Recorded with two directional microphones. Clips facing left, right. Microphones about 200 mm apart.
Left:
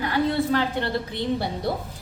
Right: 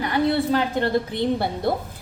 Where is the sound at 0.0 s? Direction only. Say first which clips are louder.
Right 2 dB; 15° right (ahead or behind).